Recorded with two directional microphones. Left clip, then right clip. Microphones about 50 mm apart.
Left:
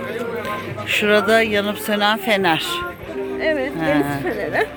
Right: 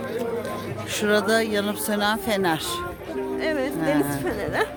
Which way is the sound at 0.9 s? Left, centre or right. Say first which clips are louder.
Left 6 dB; right.